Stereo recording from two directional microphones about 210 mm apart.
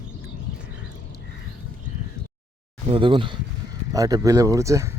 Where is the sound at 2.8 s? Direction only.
25° right (ahead or behind).